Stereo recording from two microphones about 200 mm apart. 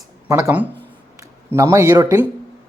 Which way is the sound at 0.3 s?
15° right (ahead or behind).